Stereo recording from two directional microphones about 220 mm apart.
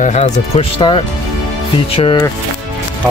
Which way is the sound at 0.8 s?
20° left (ahead or behind).